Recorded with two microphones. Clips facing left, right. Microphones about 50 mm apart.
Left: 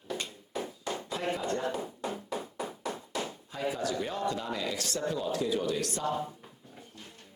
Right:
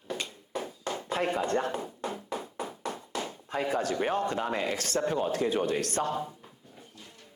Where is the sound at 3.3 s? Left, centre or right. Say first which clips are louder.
Right 4 dB; right.